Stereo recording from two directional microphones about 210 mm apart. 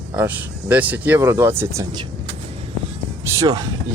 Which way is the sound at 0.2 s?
10° right (ahead or behind).